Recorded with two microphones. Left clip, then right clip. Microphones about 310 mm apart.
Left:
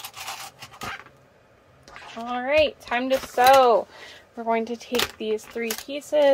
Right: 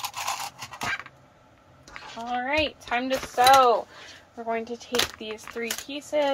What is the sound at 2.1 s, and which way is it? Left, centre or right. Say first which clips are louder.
Speech: left 5 dB; left.